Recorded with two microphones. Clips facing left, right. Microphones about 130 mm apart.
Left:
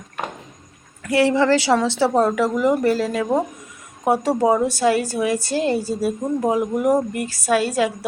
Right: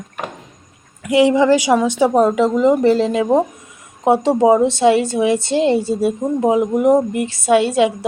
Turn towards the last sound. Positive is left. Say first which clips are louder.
# right 5 dB
turn(degrees=-25)  # may be behind; listen again after turning